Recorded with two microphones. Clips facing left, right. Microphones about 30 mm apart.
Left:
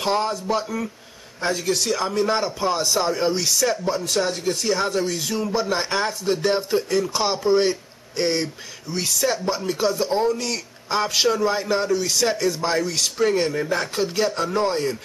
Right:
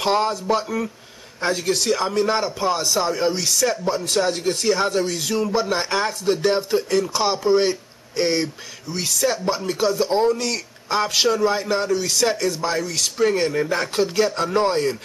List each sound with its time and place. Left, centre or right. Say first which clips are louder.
0.0 s speech: right 2 dB; centre
14.4 s speech: right 2 dB; centre